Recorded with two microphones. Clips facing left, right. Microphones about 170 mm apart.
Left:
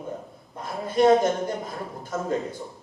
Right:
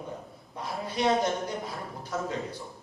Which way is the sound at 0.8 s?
50° left (ahead or behind).